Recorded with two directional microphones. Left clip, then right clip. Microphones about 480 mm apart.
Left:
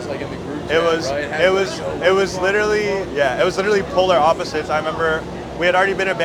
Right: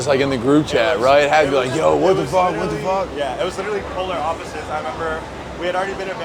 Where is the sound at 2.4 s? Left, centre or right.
Right.